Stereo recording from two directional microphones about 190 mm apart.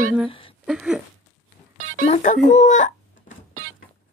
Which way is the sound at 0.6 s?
5° right (ahead or behind).